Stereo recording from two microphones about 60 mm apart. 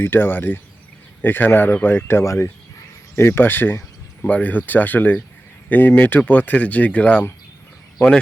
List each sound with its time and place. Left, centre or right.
0.0 s speech: left
2.2 s speech: left
3.2 s speech: left
4.2 s speech: left